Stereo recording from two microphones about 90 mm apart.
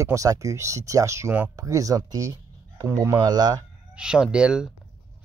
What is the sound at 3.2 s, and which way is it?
Speech, 50° right (ahead or behind).